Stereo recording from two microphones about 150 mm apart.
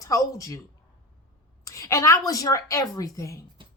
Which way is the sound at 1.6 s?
20° left (ahead or behind).